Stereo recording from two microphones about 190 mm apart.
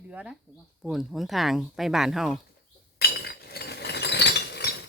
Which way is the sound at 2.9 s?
55° left (ahead or behind).